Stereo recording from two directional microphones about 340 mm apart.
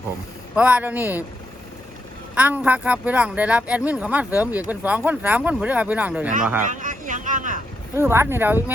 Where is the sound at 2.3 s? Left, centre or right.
Centre.